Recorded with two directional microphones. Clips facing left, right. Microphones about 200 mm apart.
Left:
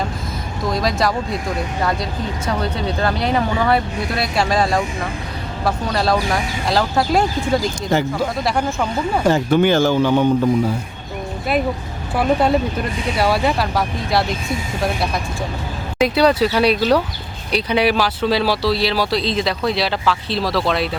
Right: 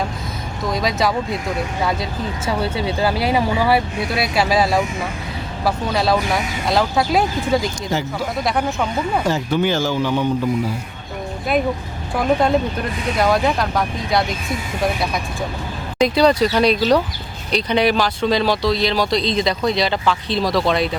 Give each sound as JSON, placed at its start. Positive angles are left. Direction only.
{"t": 0.6, "sound": "speech", "side_deg": 0}
{"t": 9.2, "sound": "speech", "side_deg": 55}
{"t": 12.1, "sound": "speech", "side_deg": 5}
{"t": 16.0, "sound": "speech", "side_deg": 5}